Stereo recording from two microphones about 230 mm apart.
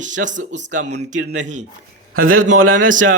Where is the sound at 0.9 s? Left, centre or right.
Right.